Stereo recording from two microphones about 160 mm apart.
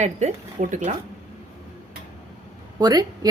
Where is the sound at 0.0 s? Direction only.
50° right (ahead or behind).